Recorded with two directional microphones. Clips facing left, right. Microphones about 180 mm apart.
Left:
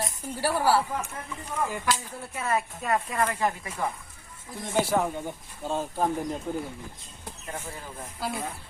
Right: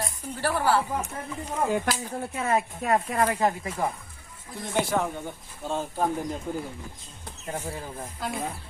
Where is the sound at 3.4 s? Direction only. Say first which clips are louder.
Right 3 dB; 25° right (ahead or behind).